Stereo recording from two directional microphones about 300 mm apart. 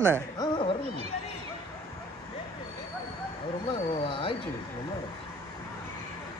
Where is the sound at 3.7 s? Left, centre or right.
Centre.